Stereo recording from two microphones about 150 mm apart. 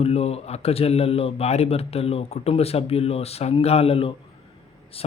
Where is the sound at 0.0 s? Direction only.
40° left (ahead or behind).